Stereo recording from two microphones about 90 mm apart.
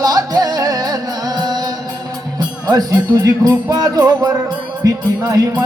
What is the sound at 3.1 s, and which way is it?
Music, 45° right (ahead or behind).